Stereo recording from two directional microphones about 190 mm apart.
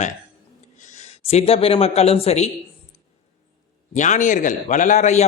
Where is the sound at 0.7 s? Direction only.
40° left (ahead or behind).